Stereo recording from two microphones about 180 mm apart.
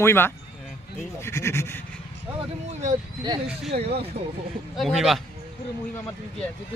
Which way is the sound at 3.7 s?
35° right (ahead or behind).